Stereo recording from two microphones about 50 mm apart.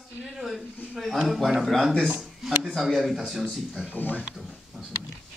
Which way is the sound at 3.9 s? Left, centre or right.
Left.